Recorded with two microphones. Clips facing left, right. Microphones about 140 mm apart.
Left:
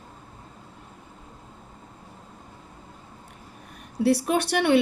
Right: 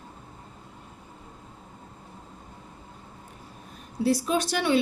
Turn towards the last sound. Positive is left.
turn(degrees=60)  # may be behind; listen again after turning